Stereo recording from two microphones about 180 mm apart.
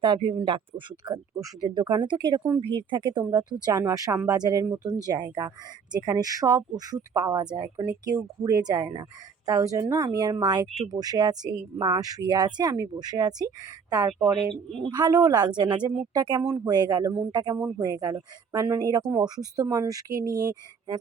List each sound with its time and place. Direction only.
0.0 s speech: 25° right (ahead or behind)
14.5 s a woman's voice: centre (ahead or behind)
14.8 s speech: 25° right (ahead or behind)